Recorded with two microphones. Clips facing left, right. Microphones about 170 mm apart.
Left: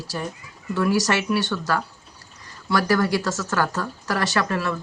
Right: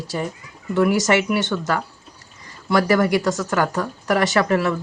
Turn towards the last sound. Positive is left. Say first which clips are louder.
# right 5 dB
turn(degrees=-20)  # may be behind; listen again after turning